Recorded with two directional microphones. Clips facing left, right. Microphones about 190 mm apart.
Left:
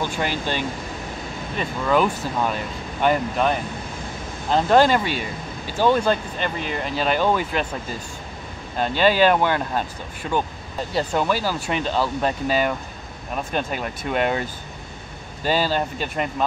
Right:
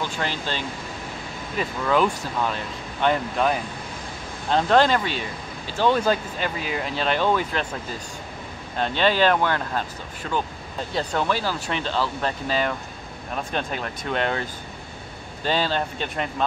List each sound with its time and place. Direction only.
0.0 s speech: 15° left (ahead or behind)
6.0 s speech: 5° right (ahead or behind)
8.7 s speech: 5° left (ahead or behind)
10.9 s speech: 5° left (ahead or behind)
15.4 s speech: 5° left (ahead or behind)